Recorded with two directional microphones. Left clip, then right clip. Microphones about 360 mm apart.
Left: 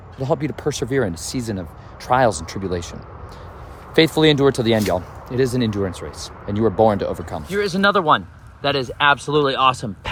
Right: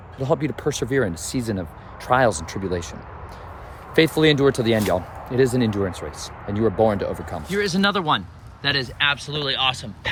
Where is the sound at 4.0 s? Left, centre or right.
Centre.